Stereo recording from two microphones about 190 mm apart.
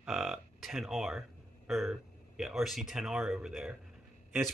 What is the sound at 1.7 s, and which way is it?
Speech, 5° right (ahead or behind).